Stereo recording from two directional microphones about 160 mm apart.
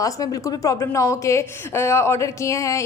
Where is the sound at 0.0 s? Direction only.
20° left (ahead or behind).